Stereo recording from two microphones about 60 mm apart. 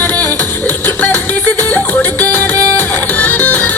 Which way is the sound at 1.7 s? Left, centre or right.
Left.